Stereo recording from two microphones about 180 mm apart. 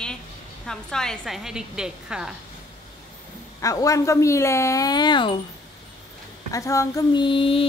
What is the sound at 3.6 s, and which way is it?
A woman's voice, 20° left (ahead or behind).